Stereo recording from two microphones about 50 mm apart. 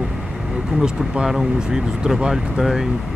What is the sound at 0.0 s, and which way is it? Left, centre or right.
Speech, centre.